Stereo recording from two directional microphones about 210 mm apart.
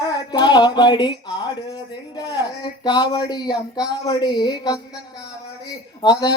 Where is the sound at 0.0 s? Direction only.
20° left (ahead or behind).